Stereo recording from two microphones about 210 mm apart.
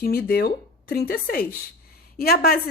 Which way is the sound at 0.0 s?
45° left (ahead or behind).